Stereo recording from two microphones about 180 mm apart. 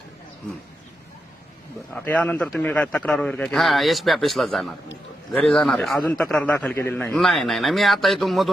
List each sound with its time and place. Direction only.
1.9 s a man's voice: 5° left (ahead or behind)